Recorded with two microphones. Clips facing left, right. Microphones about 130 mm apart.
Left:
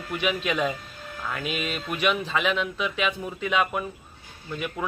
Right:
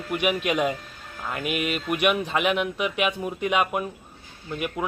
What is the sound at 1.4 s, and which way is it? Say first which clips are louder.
Speech: right 4 dB; 60° right (ahead or behind).